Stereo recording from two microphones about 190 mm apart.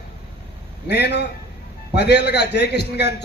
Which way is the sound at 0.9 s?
60° left (ahead or behind).